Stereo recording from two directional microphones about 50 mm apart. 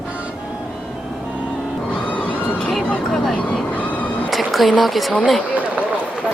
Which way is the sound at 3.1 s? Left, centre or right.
Centre.